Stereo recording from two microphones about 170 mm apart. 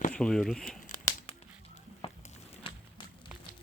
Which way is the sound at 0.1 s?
5° left (ahead or behind).